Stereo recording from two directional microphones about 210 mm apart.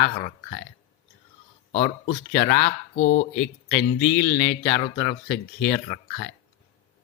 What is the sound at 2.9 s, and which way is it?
Speech, 55° left (ahead or behind).